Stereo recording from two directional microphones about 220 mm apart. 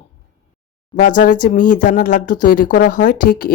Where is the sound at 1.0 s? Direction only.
35° left (ahead or behind).